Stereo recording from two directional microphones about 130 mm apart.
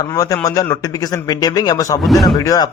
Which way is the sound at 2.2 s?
30° left (ahead or behind).